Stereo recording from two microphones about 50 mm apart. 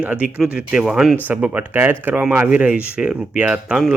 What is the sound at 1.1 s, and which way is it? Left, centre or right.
Speech, right.